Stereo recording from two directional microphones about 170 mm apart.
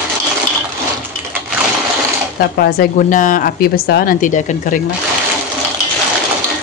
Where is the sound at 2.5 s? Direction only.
60° left (ahead or behind).